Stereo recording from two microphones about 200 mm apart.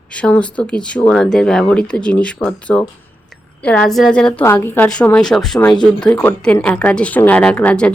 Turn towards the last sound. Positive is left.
turn(degrees=5)  # may be behind; listen again after turning